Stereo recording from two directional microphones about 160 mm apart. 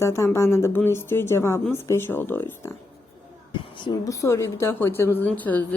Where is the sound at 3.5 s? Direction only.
30° left (ahead or behind).